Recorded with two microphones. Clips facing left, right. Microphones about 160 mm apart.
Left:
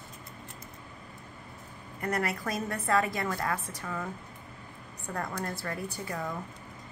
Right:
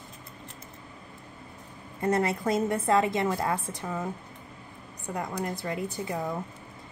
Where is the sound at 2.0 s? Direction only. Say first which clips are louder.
Right 5 dB; 25° right (ahead or behind).